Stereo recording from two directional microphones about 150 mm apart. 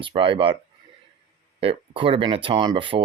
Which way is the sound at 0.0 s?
35° right (ahead or behind).